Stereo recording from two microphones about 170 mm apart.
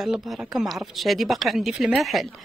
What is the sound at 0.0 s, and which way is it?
A woman's voice, centre (ahead or behind).